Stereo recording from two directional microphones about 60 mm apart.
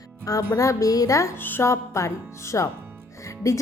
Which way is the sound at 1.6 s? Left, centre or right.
Left.